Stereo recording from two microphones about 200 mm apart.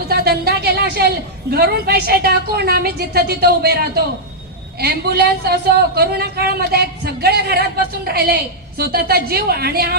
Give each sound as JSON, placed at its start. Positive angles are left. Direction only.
{"t": 0.1, "sound": "a woman's voice", "side_deg": -50}